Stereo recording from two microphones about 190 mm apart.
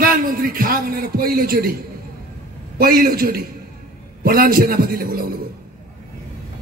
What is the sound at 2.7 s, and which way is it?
A man's voice, 50° right (ahead or behind).